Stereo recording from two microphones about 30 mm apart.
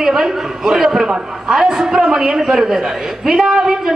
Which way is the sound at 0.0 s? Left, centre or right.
Centre.